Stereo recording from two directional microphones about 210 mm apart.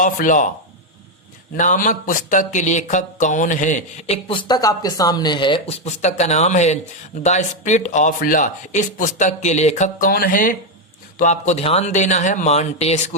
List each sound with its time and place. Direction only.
0.0 s speech: 40° left (ahead or behind)
1.5 s speech: 35° left (ahead or behind)